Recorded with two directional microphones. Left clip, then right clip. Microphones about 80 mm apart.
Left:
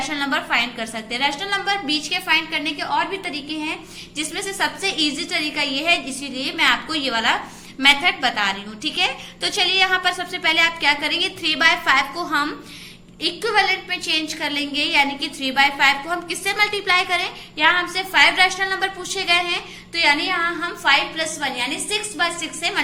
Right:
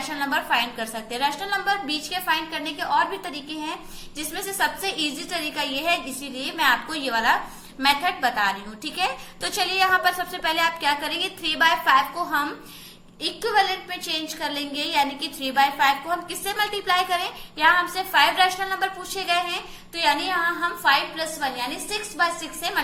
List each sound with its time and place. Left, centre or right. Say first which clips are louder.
0.1 s a woman's voice: even; right
11.5 s a woman's voice: left 1 dB; right